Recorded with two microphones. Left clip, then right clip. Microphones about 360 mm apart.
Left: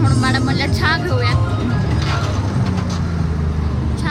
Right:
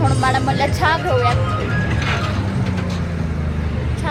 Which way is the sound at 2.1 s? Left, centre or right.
Left.